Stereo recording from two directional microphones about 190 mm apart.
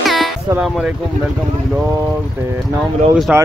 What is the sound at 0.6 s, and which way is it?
Speech, centre (ahead or behind).